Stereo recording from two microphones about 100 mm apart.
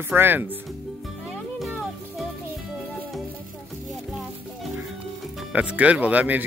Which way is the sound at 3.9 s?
Centre (ahead or behind).